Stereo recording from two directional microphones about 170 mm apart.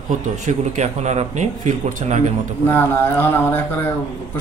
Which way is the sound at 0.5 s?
40° right (ahead or behind).